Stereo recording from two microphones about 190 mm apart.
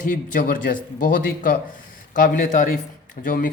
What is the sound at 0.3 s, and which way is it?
Speech, 45° left (ahead or behind).